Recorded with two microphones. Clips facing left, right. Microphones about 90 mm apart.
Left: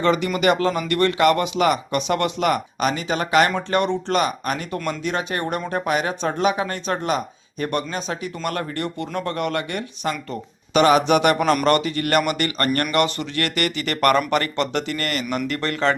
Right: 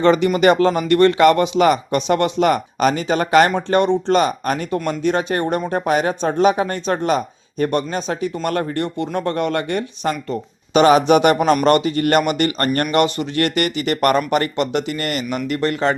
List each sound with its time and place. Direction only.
0.0 s speech: 35° right (ahead or behind); by 16.0 s 20° right (ahead or behind)